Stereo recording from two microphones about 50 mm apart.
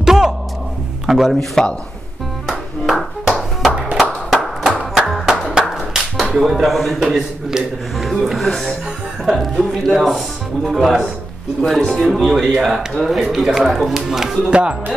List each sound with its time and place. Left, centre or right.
0.0 s music: centre
1.0 s a man's voice: centre
1.3 s speech: centre
2.9 s clapping: centre
3.9 s a sound: centre
4.9 s music: centre
5.9 s speech: centre
8.5 s speech: centre
9.2 s speech: centre
14.5 s speech: centre